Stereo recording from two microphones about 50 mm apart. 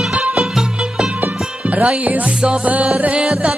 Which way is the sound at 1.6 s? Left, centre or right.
Right.